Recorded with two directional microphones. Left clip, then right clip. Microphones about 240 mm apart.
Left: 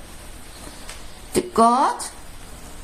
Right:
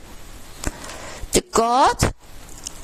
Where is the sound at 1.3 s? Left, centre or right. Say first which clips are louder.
Left 1 dB; right.